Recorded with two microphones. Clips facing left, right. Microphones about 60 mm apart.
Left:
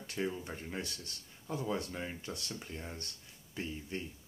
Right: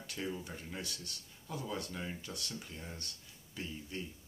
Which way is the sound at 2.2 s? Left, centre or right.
Left.